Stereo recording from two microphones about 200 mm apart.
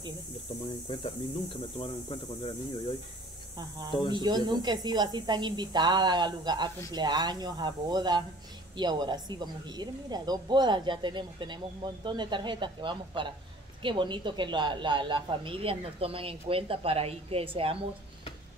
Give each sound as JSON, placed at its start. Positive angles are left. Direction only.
{"t": 0.8, "sound": "speech", "side_deg": 25}
{"t": 4.1, "sound": "speech", "side_deg": -20}